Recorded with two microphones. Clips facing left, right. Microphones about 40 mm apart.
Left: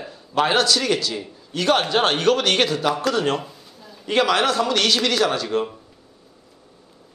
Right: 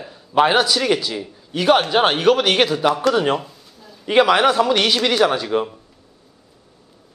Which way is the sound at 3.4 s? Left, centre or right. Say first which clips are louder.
Left 1 dB; centre.